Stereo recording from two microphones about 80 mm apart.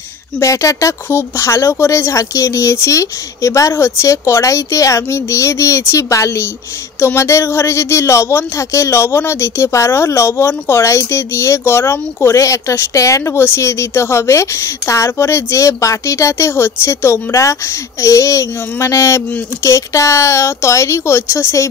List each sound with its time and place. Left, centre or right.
0.4 s speech: left